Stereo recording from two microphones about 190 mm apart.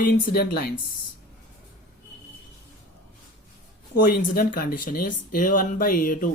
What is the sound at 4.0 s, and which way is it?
Speech, 50° left (ahead or behind).